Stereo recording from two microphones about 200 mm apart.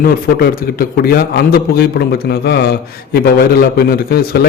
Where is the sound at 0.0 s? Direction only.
50° left (ahead or behind).